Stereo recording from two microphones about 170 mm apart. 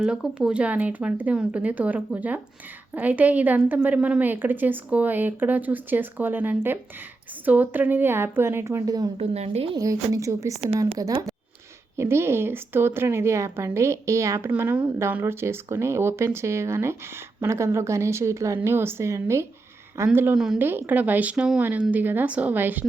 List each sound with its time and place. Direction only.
0.0 s a woman's voice: 5° right (ahead or behind); by 9.0 s 20° right (ahead or behind)
9.1 s a woman's voice: 40° right (ahead or behind)
9.7 s a woman's voice: 20° right (ahead or behind)
10.5 s a woman's voice: 35° right (ahead or behind)
11.9 s a woman's voice: 15° right (ahead or behind)